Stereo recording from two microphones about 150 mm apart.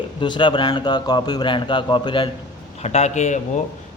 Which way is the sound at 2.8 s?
45° left (ahead or behind).